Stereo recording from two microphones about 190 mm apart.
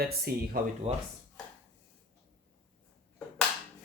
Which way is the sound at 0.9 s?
30° right (ahead or behind).